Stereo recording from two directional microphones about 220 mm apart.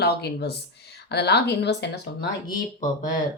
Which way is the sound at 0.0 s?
45° left (ahead or behind).